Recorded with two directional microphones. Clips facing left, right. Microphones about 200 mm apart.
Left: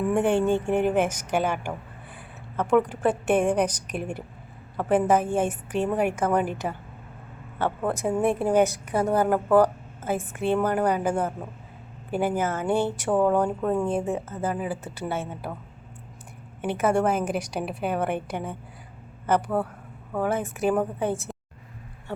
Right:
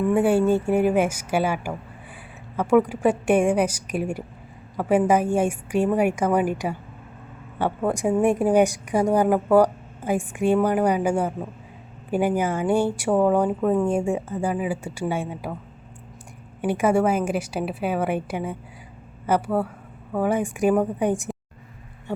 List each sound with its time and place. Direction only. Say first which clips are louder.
0.1 s a woman's voice: right 3 dB; 5° right (ahead or behind)
7.6 s a woman's voice: right 3 dB; 15° right (ahead or behind)
16.6 s a woman's voice: right 3 dB; 10° right (ahead or behind)